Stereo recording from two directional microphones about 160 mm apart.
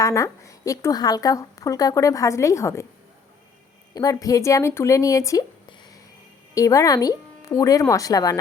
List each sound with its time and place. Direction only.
0.0 s a woman's voice: 20° left (ahead or behind)
3.9 s a woman's voice: 20° left (ahead or behind)